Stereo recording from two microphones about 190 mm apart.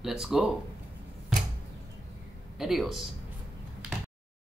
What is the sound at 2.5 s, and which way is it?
Speech, centre (ahead or behind).